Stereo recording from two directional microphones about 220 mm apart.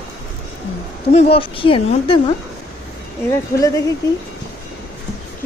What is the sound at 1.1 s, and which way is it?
Speech, 25° left (ahead or behind).